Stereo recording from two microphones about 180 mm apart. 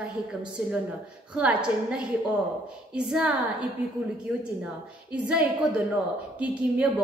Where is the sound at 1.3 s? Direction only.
5° right (ahead or behind).